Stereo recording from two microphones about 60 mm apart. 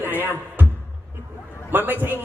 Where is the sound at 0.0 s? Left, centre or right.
Right.